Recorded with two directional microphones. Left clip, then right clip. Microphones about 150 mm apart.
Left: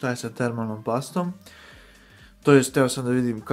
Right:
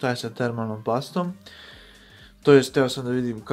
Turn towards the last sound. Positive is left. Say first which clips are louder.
# left 2 dB
turn(degrees=20)  # may be behind; listen again after turning